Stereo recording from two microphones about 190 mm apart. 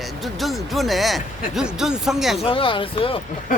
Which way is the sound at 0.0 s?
Centre (ahead or behind).